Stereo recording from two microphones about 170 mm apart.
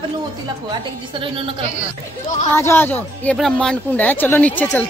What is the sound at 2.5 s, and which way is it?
A woman's voice, 15° left (ahead or behind).